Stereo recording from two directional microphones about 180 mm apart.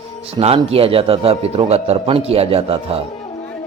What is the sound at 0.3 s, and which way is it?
A man's voice, 35° right (ahead or behind).